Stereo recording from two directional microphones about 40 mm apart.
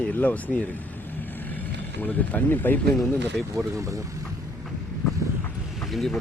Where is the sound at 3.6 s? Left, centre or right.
Centre.